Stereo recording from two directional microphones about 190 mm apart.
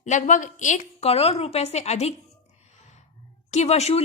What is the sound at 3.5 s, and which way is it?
Speech, 35° left (ahead or behind).